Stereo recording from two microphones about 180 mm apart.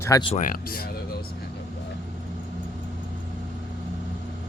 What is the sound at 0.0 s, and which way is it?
Speech, 20° left (ahead or behind).